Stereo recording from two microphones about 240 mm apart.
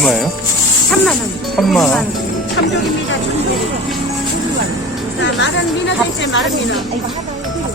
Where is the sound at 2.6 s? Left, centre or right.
Left.